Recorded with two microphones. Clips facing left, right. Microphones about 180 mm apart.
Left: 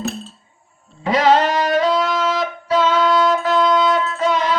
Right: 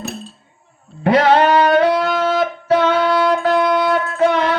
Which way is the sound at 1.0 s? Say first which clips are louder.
Right 3 dB; 60° right (ahead or behind).